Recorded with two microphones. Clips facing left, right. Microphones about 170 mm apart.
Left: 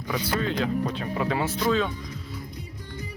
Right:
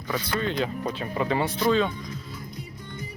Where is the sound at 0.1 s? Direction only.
10° left (ahead or behind).